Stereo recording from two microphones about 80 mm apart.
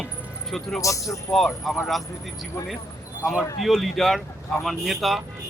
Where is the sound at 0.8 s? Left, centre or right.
Left.